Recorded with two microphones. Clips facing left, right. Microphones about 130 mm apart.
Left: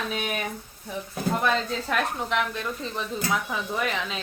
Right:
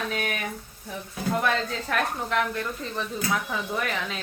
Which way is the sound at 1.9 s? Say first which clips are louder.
Right 1 dB; 15° left (ahead or behind).